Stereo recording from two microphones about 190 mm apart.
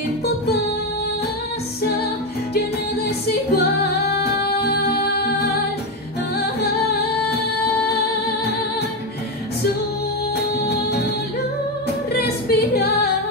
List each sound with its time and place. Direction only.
3.5 s music: 55° left (ahead or behind)
12.1 s a capella: 55° left (ahead or behind)